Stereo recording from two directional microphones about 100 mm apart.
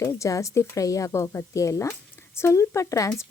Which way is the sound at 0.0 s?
35° left (ahead or behind).